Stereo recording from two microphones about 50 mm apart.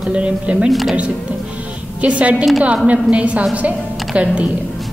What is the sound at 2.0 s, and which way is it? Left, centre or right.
A woman's voice, right.